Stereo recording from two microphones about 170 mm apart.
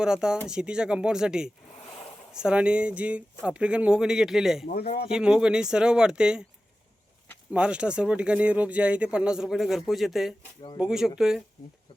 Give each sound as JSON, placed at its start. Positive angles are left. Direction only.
{"t": 0.0, "sound": "speech", "side_deg": -5}
{"t": 4.6, "sound": "a man's voice", "side_deg": 65}
{"t": 5.0, "sound": "speech", "side_deg": -5}
{"t": 7.5, "sound": "speech", "side_deg": -5}